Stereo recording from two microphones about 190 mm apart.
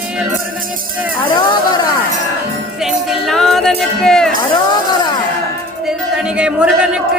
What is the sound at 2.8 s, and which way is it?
Music, centre (ahead or behind).